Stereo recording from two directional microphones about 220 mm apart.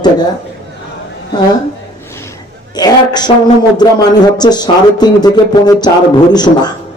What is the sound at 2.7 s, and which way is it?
Speech, 20° left (ahead or behind).